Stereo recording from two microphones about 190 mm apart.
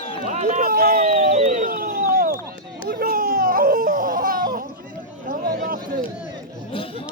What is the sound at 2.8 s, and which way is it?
Baby cry, 50° right (ahead or behind).